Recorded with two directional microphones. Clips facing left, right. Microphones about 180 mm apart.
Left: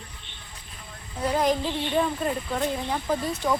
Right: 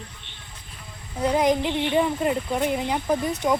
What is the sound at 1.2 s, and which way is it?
Speech, 20° right (ahead or behind).